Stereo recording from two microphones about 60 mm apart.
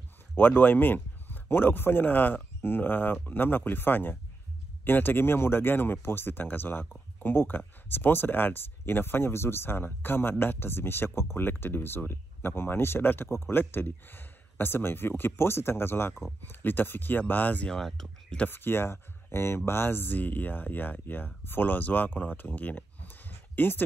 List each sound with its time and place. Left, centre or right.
0.4 s speech: left
17.6 s speech: centre
18.5 s speech: left